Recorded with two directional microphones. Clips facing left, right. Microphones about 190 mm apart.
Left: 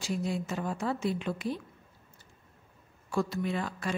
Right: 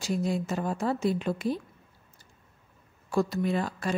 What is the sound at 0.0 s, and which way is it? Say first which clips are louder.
A woman's voice: right 4 dB; 40° right (ahead or behind).